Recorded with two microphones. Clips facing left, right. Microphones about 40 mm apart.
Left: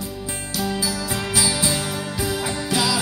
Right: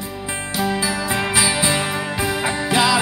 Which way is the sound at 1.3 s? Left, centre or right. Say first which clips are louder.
Right 3 dB; right.